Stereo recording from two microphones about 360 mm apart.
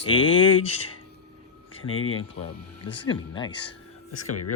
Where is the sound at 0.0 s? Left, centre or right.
Centre.